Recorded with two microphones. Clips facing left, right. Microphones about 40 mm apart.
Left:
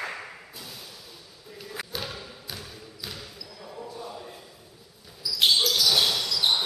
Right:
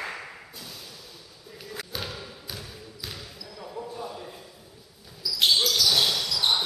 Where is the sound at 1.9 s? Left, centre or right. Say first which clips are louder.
Even; centre.